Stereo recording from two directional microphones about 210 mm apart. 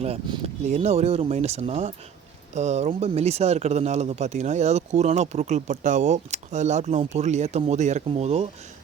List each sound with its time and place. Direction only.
0.0 s speech: 30° right (ahead or behind)